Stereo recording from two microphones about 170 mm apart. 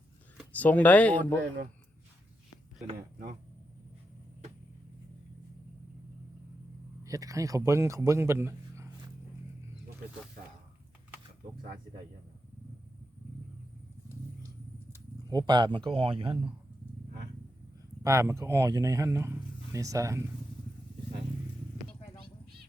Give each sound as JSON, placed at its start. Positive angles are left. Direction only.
{"t": 0.5, "sound": "speech", "side_deg": 10}
{"t": 7.0, "sound": "a man's voice", "side_deg": -20}
{"t": 15.3, "sound": "speech", "side_deg": -25}
{"t": 18.0, "sound": "speech", "side_deg": -15}